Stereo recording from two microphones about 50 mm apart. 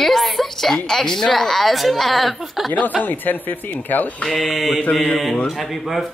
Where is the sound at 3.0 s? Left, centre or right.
Left.